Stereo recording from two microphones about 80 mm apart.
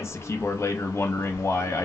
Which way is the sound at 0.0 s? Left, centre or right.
Left.